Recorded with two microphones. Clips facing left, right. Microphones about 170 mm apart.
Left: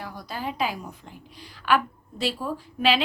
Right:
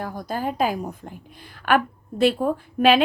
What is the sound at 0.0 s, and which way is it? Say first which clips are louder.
A woman's voice: right 6 dB; 50° right (ahead or behind).